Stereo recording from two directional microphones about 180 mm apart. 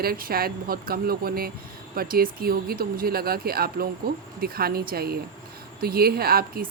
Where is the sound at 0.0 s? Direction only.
55° right (ahead or behind).